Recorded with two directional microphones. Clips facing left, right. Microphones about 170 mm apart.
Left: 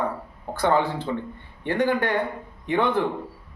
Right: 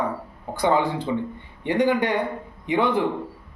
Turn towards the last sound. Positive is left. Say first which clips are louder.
# right 1 dB
turn(degrees=-10)  # may be behind; listen again after turning